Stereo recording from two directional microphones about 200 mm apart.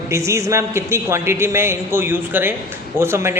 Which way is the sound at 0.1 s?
15° right (ahead or behind).